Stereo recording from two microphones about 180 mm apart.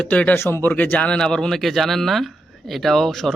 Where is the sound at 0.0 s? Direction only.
5° left (ahead or behind).